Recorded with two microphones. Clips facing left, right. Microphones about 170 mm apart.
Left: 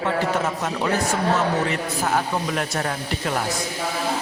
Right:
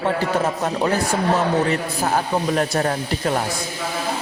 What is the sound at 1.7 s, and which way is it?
A woman's voice, 35° right (ahead or behind).